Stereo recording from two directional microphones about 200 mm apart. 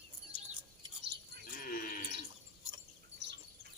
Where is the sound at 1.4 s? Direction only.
45° left (ahead or behind).